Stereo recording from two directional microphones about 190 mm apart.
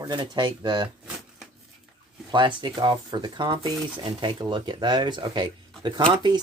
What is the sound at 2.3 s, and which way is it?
Speech, 25° right (ahead or behind).